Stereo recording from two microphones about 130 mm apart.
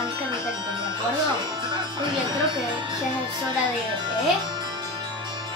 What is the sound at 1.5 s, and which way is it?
Music, 35° right (ahead or behind).